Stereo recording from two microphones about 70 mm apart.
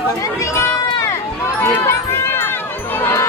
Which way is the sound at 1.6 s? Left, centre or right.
Left.